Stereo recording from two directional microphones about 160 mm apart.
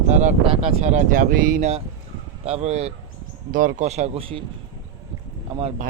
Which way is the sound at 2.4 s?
40° right (ahead or behind).